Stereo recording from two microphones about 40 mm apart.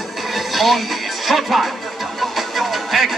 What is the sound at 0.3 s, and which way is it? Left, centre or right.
Music, centre.